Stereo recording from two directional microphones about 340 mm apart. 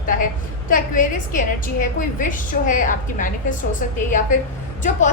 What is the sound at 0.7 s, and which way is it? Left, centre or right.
A woman's voice, left.